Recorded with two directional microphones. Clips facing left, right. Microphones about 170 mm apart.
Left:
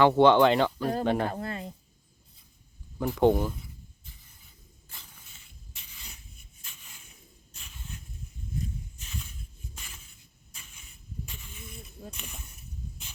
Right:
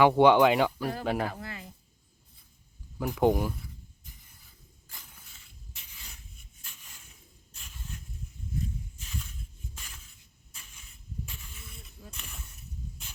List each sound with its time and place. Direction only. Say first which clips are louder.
0.0 s speech: left 1 dB; 10° right (ahead or behind)
1.4 s speech: left 7 dB; 25° left (ahead or behind)
3.0 s speech: left 2 dB; 10° right (ahead or behind)
11.5 s a sound: left 5 dB; 25° left (ahead or behind)